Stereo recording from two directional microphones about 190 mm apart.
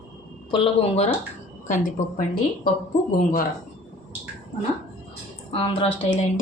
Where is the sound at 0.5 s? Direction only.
30° left (ahead or behind).